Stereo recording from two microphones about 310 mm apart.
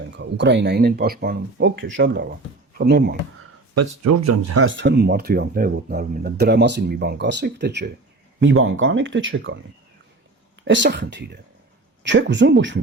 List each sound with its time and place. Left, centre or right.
0.0 s speech: right
3.8 s speech: right
4.6 s speech: right
10.6 s speech: right